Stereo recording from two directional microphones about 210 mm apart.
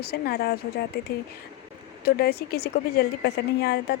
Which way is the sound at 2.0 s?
50° left (ahead or behind).